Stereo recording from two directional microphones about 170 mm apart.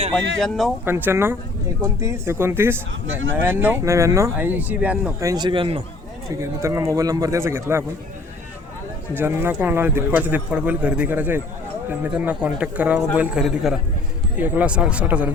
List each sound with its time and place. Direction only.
0.3 s a man's voice: centre (ahead or behind)
0.9 s speech: 10° right (ahead or behind)
5.3 s speech: 25° right (ahead or behind)
6.2 s speech: 15° right (ahead or behind)
9.1 s a man's voice: 15° right (ahead or behind)